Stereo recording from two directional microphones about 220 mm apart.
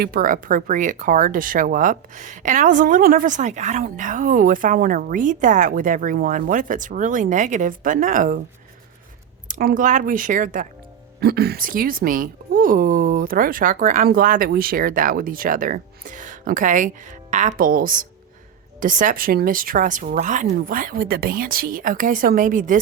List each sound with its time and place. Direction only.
0.0 s speech: 40° right (ahead or behind)
9.5 s speech: 40° right (ahead or behind)